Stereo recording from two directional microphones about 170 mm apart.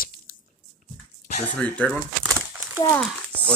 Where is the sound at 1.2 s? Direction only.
45° left (ahead or behind).